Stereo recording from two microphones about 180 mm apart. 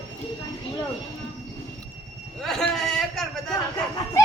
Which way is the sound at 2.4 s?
Centre (ahead or behind).